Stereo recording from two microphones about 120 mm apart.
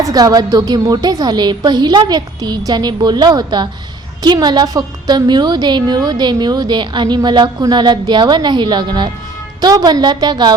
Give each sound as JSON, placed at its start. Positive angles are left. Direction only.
{"t": 0.0, "sound": "a woman's voice", "side_deg": -30}